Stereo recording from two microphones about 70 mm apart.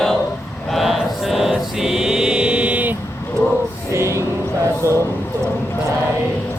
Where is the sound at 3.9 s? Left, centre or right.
Right.